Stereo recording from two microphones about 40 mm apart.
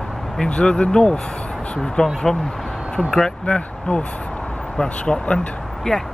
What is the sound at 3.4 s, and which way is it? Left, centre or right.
Speech, left.